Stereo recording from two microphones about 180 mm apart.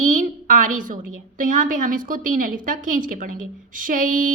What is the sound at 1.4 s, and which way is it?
A woman's voice, 50° right (ahead or behind).